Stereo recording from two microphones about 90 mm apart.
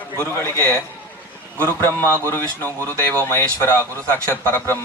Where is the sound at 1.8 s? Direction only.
25° left (ahead or behind).